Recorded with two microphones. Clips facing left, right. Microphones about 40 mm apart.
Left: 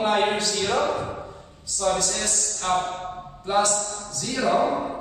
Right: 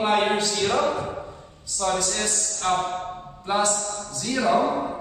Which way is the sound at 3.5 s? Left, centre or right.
Centre.